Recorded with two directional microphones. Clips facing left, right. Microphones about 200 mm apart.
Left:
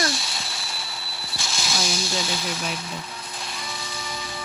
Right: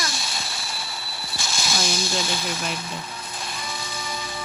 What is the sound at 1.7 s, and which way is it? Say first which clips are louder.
Speech: right 1 dB; centre (ahead or behind).